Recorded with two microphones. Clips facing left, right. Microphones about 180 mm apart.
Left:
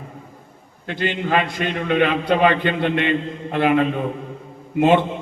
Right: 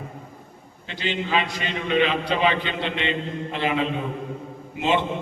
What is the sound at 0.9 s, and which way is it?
A man's voice, 55° left (ahead or behind).